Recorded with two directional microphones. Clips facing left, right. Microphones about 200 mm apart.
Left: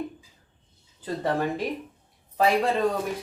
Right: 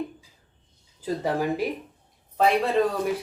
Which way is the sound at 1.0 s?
10° right (ahead or behind).